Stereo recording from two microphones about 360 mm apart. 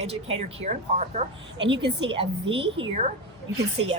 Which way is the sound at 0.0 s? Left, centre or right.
Centre.